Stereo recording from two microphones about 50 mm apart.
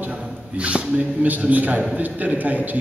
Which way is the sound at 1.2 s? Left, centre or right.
Right.